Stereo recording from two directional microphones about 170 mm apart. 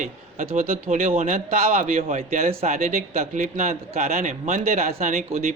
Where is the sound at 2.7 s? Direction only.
55° right (ahead or behind).